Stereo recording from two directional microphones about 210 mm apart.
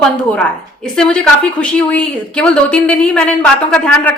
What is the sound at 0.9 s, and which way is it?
A woman's voice, 5° left (ahead or behind).